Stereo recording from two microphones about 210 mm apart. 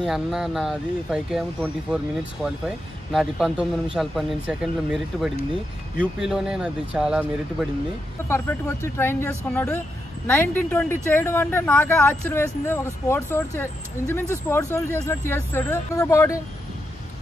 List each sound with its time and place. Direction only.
0.0 s a man's voice: centre (ahead or behind)
8.3 s speech: 10° left (ahead or behind)